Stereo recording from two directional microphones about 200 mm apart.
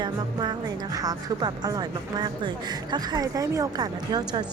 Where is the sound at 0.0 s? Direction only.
20° right (ahead or behind).